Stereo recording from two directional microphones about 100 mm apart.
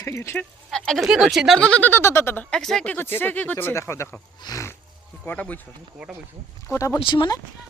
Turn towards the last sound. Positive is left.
turn(degrees=55)  # may be behind; listen again after turning